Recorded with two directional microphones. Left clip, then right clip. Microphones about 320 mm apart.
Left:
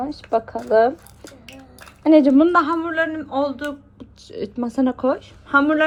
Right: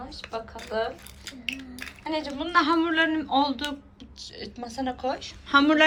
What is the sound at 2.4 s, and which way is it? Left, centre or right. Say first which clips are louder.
Speech: left 6 dB; centre.